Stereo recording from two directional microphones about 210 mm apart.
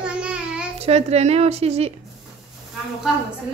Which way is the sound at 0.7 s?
30° right (ahead or behind).